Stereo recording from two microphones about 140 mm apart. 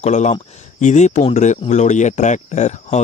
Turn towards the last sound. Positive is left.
turn(degrees=55)  # may be behind; listen again after turning